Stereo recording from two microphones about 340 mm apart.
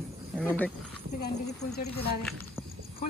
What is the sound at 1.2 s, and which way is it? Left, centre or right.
Speech, left.